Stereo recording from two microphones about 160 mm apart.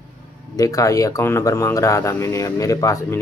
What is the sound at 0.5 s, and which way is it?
Speech, 20° left (ahead or behind).